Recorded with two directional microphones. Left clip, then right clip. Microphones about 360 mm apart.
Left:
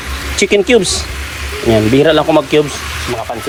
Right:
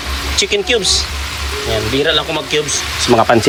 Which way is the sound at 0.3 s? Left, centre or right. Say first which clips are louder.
Left 5 dB; centre.